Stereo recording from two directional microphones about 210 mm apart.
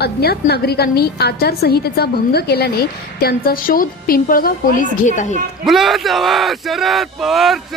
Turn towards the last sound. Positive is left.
turn(degrees=0)  # may be behind; listen again after turning